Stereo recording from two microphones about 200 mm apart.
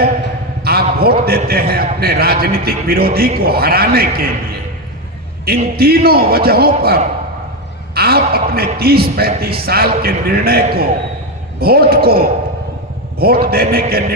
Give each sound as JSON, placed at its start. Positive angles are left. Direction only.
{"t": 0.6, "sound": "a man's voice", "side_deg": -50}
{"t": 5.7, "sound": "a man's voice", "side_deg": -50}